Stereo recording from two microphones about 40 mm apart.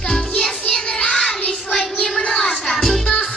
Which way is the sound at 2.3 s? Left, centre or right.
Centre.